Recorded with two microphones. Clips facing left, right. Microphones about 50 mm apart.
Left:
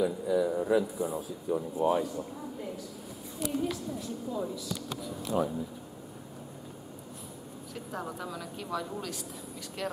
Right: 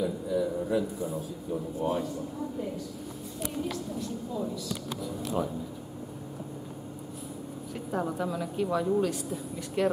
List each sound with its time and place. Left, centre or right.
0.0 s a man's voice: centre
3.6 s a sound: centre
5.0 s speech: centre
7.7 s a woman's voice: centre